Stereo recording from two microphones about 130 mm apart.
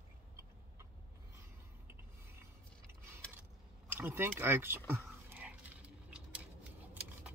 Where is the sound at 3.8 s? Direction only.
15° right (ahead or behind).